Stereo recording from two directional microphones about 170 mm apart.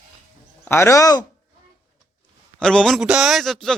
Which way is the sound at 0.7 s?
15° left (ahead or behind).